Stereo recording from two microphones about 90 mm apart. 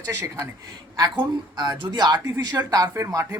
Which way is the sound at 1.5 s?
50° right (ahead or behind).